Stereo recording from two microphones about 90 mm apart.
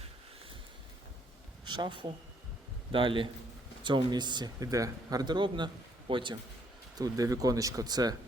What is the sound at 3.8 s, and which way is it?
Speech, 60° right (ahead or behind).